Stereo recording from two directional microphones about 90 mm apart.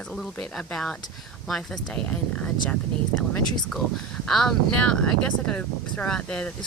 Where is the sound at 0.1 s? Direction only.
5° left (ahead or behind).